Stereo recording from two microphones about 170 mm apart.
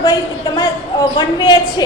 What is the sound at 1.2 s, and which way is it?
Speech, 25° left (ahead or behind).